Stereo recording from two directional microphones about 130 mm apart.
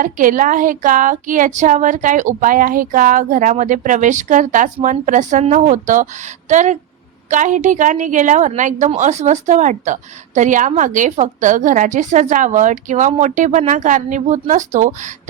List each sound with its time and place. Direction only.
0.0 s a woman's voice: 90° right; by 15.1 s 70° right (ahead or behind)